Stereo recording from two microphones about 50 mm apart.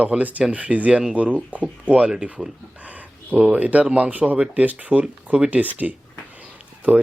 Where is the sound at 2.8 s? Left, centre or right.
Right.